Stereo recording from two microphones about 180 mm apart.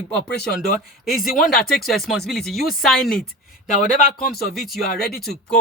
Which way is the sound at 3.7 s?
45° left (ahead or behind).